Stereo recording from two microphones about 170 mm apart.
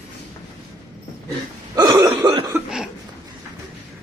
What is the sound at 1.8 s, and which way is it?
Cough, 20° right (ahead or behind).